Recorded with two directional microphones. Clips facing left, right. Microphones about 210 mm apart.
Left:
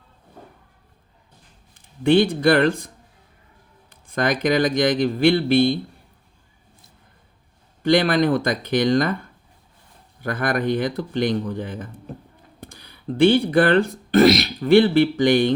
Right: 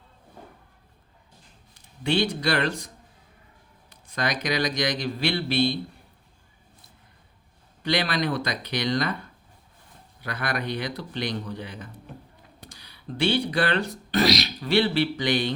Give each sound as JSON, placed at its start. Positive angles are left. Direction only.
{"t": 1.7, "sound": "a man's voice", "side_deg": 50}
{"t": 7.8, "sound": "speech", "side_deg": 50}
{"t": 12.5, "sound": "a sound", "side_deg": 55}
{"t": 13.1, "sound": "speech", "side_deg": 50}